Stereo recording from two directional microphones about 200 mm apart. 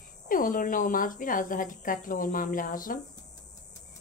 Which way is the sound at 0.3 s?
45° left (ahead or behind).